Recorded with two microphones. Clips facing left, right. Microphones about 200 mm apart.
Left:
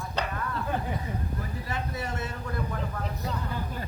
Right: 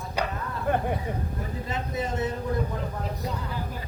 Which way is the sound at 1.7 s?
20° right (ahead or behind).